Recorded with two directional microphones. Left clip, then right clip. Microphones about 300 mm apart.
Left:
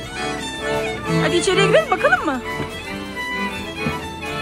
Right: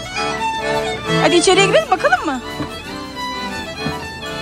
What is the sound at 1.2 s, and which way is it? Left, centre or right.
Speech, centre.